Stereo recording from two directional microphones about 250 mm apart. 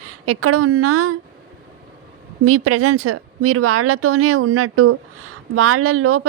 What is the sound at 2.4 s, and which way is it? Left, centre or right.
A woman's voice, right.